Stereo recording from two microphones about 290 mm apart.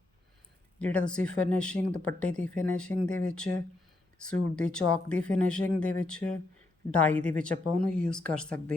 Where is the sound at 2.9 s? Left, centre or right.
Right.